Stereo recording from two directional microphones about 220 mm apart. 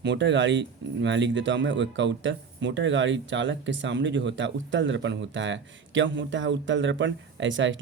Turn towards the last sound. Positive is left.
turn(degrees=-60)  # may be behind; listen again after turning